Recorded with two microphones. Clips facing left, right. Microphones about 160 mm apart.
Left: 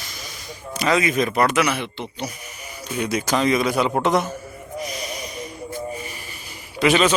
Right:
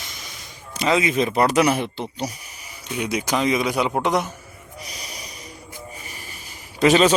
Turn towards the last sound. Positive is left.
turn(degrees=-35)  # may be behind; listen again after turning